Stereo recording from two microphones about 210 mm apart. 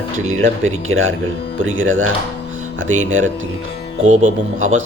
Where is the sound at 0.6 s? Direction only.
70° right (ahead or behind).